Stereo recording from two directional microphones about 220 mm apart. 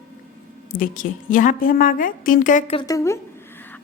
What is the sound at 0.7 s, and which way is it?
A woman's voice, 40° left (ahead or behind).